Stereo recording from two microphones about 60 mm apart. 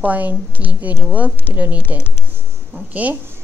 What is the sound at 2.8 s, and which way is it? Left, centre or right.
Speech, right.